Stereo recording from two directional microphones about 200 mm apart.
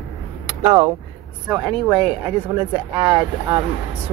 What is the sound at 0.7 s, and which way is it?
Speech, 20° right (ahead or behind).